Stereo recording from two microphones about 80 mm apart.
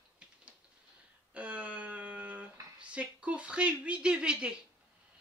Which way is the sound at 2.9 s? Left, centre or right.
Centre.